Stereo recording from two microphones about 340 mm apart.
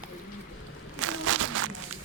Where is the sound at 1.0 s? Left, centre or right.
Right.